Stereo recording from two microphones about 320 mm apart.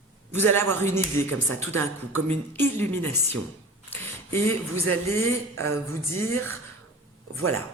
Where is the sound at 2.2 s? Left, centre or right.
Centre.